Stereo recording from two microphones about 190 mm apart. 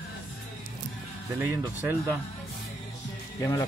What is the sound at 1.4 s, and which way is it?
Speech, 10° right (ahead or behind).